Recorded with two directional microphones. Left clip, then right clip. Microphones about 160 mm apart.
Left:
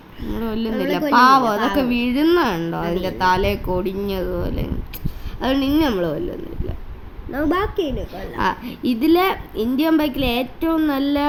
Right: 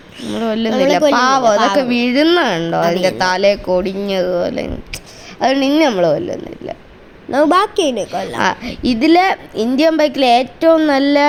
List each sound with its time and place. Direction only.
0.3 s a woman's voice: 25° right (ahead or behind)
7.3 s a woman's voice: 45° right (ahead or behind)
8.4 s a woman's voice: 30° right (ahead or behind)